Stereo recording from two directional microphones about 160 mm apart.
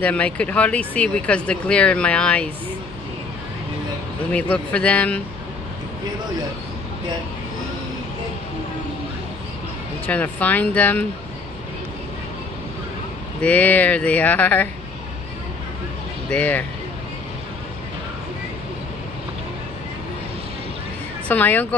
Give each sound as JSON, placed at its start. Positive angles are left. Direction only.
{"t": 0.0, "sound": "speech", "side_deg": 10}
{"t": 4.3, "sound": "speech", "side_deg": 10}
{"t": 10.0, "sound": "speech", "side_deg": 10}
{"t": 13.4, "sound": "speech", "side_deg": 10}
{"t": 16.3, "sound": "speech", "side_deg": 10}
{"t": 21.3, "sound": "speech", "side_deg": 10}